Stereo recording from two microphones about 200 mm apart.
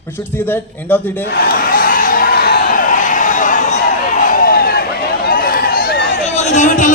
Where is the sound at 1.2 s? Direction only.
50° left (ahead or behind).